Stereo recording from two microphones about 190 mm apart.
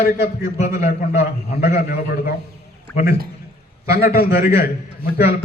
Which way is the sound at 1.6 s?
50° left (ahead or behind).